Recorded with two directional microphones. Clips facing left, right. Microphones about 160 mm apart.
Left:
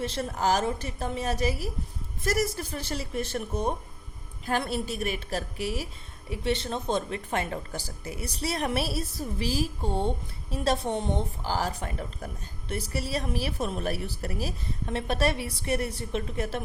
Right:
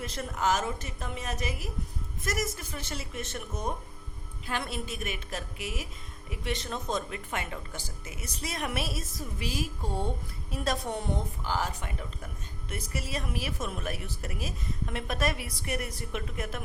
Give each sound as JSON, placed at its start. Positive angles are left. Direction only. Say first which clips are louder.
{"t": 0.0, "sound": "a woman's voice", "louder": "left 3 dB", "side_deg": 30}